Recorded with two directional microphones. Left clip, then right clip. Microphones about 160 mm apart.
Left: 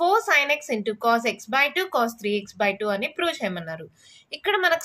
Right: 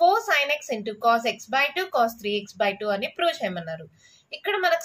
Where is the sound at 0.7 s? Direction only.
35° left (ahead or behind).